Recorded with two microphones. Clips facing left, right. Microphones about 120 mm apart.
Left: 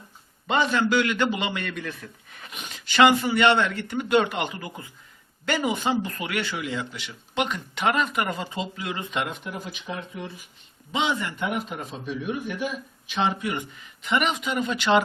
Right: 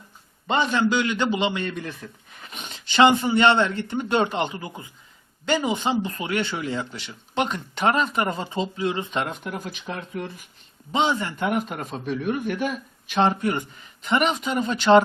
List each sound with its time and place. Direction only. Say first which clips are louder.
0.6 s speech: even; 20° right (ahead or behind); by 9.6 s 45° right (ahead or behind)
10.9 s speech: right 3 dB; 35° right (ahead or behind)
11.4 s a man's voice: right 5 dB; 50° right (ahead or behind)